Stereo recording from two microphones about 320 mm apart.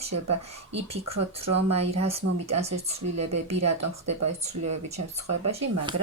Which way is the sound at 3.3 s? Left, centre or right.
Right.